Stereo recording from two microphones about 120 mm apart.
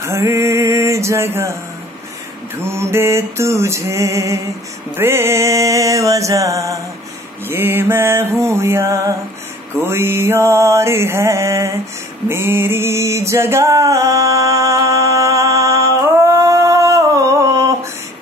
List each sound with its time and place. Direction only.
0.0 s music: 25° right (ahead or behind)
2.5 s mantra: 20° right (ahead or behind)
12.3 s music: 20° right (ahead or behind)